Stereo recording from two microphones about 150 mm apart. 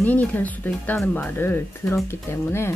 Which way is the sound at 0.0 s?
10° left (ahead or behind).